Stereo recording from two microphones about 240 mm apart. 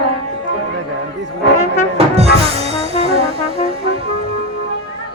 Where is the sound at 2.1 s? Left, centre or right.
Right.